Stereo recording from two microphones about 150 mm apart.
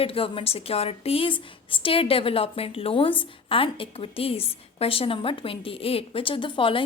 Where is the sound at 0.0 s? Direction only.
40° left (ahead or behind).